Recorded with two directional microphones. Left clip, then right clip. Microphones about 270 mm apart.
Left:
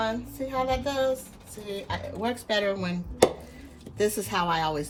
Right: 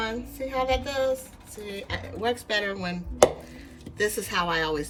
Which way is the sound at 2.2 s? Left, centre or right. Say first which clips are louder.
Even; centre.